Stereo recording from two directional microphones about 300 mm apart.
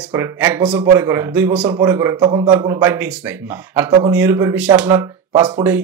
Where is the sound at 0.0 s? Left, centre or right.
Centre.